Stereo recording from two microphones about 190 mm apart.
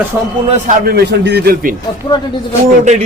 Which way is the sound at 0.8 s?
60° right (ahead or behind).